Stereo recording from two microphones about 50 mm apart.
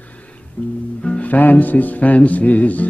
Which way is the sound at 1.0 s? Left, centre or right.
Left.